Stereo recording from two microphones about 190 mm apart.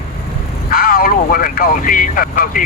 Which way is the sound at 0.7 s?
50° left (ahead or behind).